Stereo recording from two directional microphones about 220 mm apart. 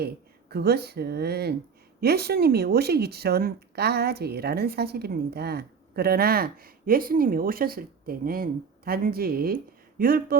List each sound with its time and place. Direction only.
0.5 s speech: 45° right (ahead or behind)